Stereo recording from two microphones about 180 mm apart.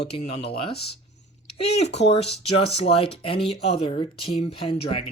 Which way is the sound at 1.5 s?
35° left (ahead or behind).